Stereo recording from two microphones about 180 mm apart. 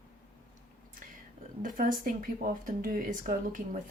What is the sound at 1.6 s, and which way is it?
Speech, 50° right (ahead or behind).